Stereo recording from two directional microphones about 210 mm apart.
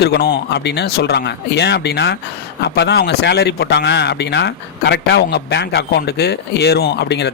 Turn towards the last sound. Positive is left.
turn(degrees=55)  # may be behind; listen again after turning